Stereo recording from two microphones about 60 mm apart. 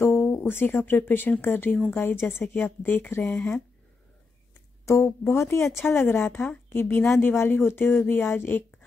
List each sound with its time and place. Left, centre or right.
0.0 s speech: left
3.3 s speech: centre
4.6 s speech: left
5.9 s speech: left
6.3 s a woman's voice: centre
6.7 s speech: left